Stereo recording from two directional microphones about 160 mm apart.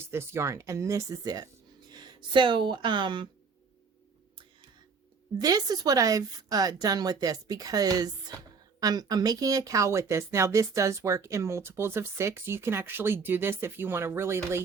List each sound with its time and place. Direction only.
0.1 s a woman's voice: 15° right (ahead or behind)
5.4 s a woman's voice: 25° right (ahead or behind)